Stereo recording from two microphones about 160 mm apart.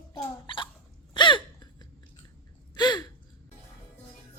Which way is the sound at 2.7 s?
25° left (ahead or behind).